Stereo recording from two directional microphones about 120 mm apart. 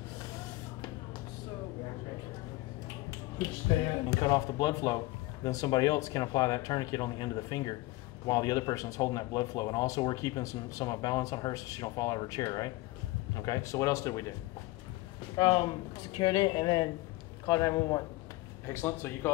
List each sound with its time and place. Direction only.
3.3 s speech: 35° left (ahead or behind)
15.3 s speech: 40° left (ahead or behind)
18.7 s speech: 20° left (ahead or behind)